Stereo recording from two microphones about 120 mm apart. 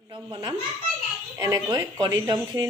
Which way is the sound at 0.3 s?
40° right (ahead or behind).